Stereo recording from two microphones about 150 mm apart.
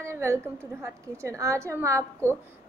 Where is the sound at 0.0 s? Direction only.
20° right (ahead or behind).